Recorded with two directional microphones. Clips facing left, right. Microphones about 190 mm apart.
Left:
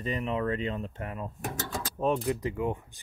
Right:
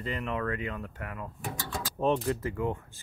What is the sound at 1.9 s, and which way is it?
Speech, 5° left (ahead or behind).